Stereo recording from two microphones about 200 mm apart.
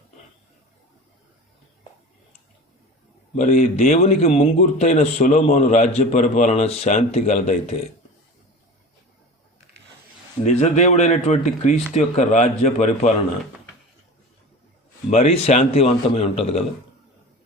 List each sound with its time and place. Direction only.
3.3 s a man's voice: 40° left (ahead or behind)
10.4 s a man's voice: 35° left (ahead or behind)
15.1 s a man's voice: 30° left (ahead or behind)